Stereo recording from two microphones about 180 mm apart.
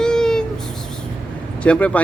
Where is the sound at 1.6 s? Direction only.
5° left (ahead or behind).